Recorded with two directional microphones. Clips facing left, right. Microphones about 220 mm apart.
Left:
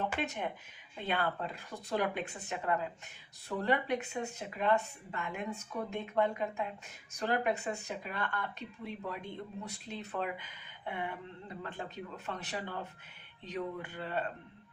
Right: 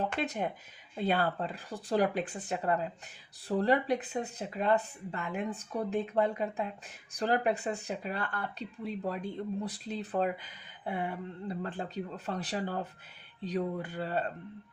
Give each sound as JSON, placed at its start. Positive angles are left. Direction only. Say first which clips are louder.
{"t": 0.2, "sound": "speech", "louder": "right 3 dB", "side_deg": -35}